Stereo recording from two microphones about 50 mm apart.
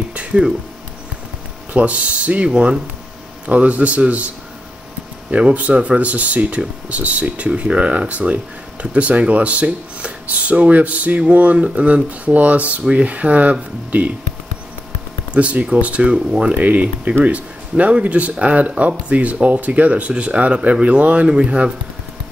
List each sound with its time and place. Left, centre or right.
0.1 s a sound: right
1.7 s speech: right
5.3 s speech: right
15.3 s speech: right
16.5 s speech: right